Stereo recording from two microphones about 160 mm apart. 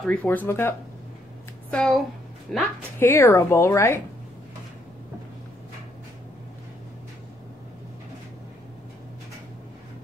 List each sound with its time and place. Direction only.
0.0 s speech: 10° left (ahead or behind)
1.7 s a woman's voice: 5° left (ahead or behind)
3.0 s speech: 15° left (ahead or behind)